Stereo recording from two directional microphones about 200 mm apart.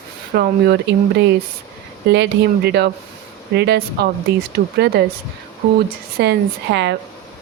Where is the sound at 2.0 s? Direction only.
55° right (ahead or behind).